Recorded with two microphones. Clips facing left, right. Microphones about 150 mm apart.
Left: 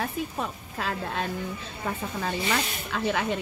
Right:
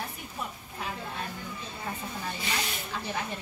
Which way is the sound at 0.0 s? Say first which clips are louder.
Left 8 dB; 85° left.